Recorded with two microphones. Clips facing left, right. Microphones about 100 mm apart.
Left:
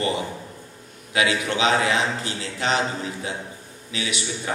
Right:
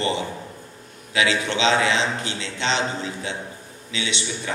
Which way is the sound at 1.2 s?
25° right (ahead or behind).